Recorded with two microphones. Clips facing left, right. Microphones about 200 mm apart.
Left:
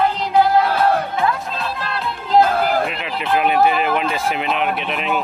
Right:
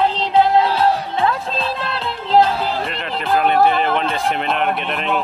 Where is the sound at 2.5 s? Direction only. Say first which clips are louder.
Left 3 dB; 55° left (ahead or behind).